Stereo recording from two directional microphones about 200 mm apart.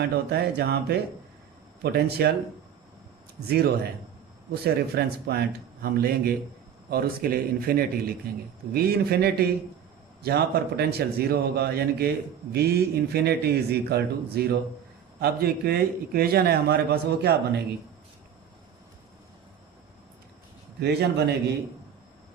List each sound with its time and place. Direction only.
0.0 s a man's voice: 55° right (ahead or behind)
3.4 s a man's voice: 50° right (ahead or behind)
20.8 s a man's voice: 55° right (ahead or behind)